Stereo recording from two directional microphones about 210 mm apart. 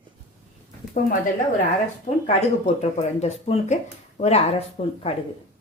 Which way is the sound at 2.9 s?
30° left (ahead or behind).